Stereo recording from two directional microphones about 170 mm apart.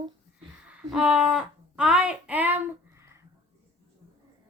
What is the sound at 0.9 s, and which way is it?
Speech, 5° right (ahead or behind).